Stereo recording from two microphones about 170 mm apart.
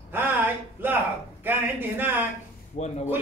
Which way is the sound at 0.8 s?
10° right (ahead or behind).